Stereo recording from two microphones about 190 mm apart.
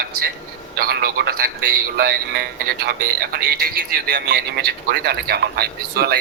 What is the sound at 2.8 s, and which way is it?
Speech, 55° right (ahead or behind).